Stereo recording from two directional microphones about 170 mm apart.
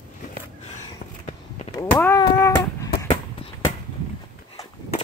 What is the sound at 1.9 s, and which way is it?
Speech, 10° left (ahead or behind).